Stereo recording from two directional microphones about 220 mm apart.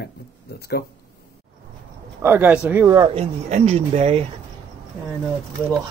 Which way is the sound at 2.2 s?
10° right (ahead or behind).